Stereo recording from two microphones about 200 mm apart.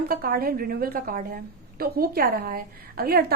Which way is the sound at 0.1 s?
50° right (ahead or behind).